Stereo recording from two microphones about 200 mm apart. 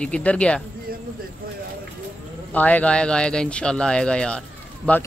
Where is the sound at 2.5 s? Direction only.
10° left (ahead or behind).